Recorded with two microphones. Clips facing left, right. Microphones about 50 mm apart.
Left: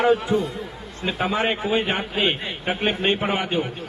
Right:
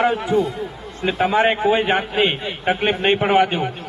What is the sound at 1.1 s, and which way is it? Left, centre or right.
Speech, right.